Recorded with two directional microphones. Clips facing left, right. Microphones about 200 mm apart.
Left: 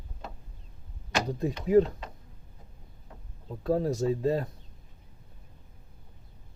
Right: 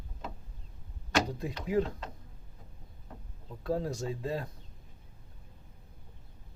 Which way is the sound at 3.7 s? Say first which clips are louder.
Left 6 dB; 15° left (ahead or behind).